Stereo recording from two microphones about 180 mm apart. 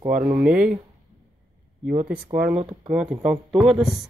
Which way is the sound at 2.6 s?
25° right (ahead or behind).